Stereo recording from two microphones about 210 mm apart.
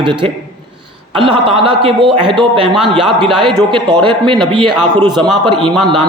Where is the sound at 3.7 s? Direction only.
25° right (ahead or behind).